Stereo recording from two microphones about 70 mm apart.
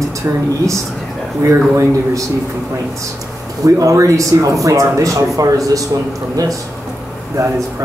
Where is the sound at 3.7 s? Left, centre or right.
Right.